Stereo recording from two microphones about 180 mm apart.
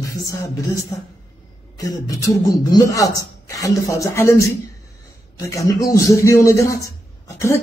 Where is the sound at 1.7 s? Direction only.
20° left (ahead or behind).